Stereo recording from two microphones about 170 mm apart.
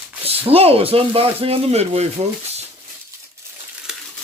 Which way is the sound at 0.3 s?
35° right (ahead or behind).